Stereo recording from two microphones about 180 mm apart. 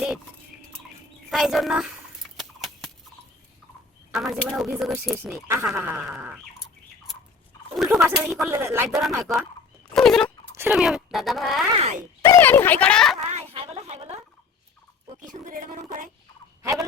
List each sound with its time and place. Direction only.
1.3 s speech: centre (ahead or behind)
2.3 s horse: centre (ahead or behind)
4.1 s speech: centre (ahead or behind)
7.8 s a sound: centre (ahead or behind)
8.0 s speech: 15° right (ahead or behind)
8.9 s speech: centre (ahead or behind)
9.9 s fowl: 5° left (ahead or behind)
10.5 s speech: 10° right (ahead or behind)
11.7 s speech: 35° right (ahead or behind)
12.2 s speech: 15° left (ahead or behind)
13.3 s a sound: 35° right (ahead or behind)
15.1 s a woman's voice: 45° right (ahead or behind)